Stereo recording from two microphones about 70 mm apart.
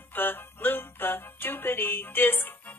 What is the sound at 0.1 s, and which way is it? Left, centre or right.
Music, left.